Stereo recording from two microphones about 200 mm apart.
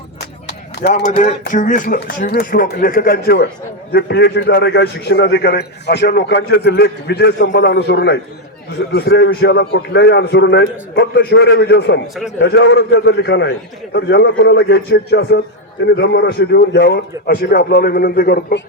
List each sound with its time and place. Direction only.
0.8 s a man's voice: 55° left (ahead or behind)
1.1 s speech: 40° left (ahead or behind)
2.0 s a man's voice: 50° left (ahead or behind)